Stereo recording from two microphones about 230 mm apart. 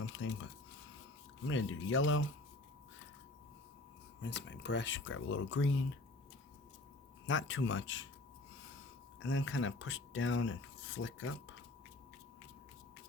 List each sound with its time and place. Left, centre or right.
0.0 s speech: left
4.2 s speech: left
7.3 s speech: left
9.2 s speech: left